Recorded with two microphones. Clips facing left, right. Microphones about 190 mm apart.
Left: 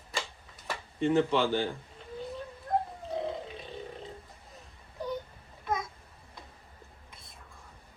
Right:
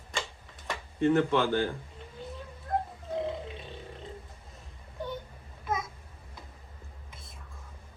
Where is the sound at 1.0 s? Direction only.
15° left (ahead or behind).